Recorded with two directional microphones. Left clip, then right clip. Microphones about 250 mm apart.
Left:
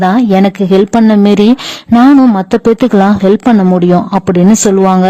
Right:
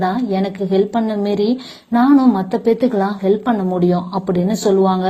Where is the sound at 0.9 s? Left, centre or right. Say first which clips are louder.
Left 10 dB; left.